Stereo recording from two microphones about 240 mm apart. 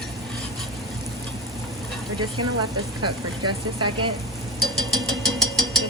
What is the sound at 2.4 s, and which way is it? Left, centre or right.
Speech, right.